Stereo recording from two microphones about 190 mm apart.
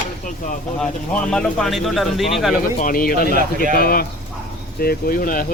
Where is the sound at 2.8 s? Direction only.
45° left (ahead or behind).